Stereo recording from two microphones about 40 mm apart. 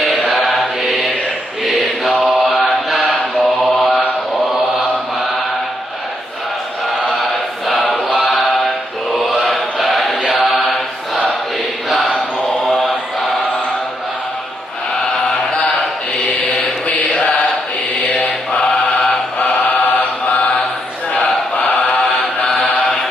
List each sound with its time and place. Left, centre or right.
0.0 s mantra: centre
7.7 s choir: centre
8.3 s a sound: centre
9.1 s chant: centre
10.3 s mantra: centre
11.9 s chant: centre
12.6 s mantra: centre
16.9 s chant: left
18.0 s chant: left
21.6 s mantra: left